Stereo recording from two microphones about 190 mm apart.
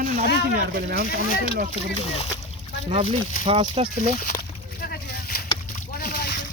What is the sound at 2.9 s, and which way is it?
Speech, 30° right (ahead or behind).